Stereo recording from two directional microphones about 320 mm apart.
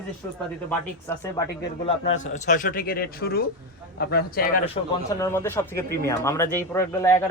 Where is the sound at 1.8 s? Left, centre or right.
Left.